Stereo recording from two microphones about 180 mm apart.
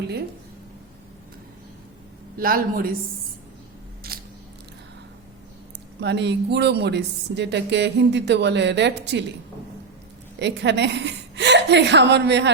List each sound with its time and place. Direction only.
2.4 s a woman's voice: 55° right (ahead or behind)
4.1 s biting: 55° right (ahead or behind)
6.0 s speech: 75° right (ahead or behind)
10.4 s a woman's voice: 75° right (ahead or behind)